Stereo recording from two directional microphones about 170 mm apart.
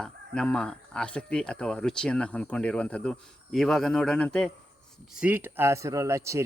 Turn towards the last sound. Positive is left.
turn(degrees=-15)  # may be behind; listen again after turning